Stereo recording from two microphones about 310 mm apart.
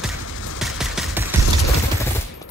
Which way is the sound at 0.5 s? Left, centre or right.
Centre.